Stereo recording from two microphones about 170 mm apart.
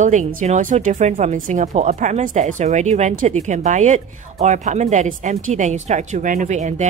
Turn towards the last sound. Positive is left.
turn(degrees=-45)  # may be behind; listen again after turning